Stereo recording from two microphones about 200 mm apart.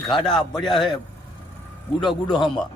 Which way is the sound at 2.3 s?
25° left (ahead or behind).